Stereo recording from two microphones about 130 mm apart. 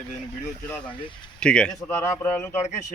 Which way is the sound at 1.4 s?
5° left (ahead or behind).